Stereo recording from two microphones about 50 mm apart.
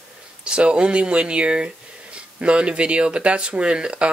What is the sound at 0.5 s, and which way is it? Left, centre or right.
Speech, right.